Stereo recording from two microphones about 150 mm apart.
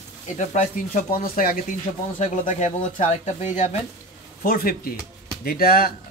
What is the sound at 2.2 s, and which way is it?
Speech, 55° left (ahead or behind).